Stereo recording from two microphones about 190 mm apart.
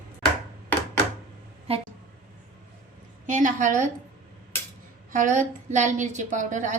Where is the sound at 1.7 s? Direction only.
30° right (ahead or behind).